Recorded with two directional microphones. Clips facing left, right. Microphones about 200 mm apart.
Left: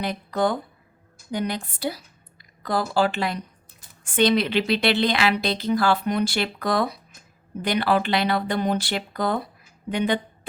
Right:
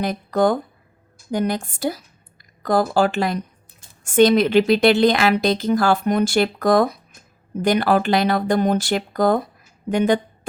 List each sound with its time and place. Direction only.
0.0 s a woman's voice: 45° right (ahead or behind)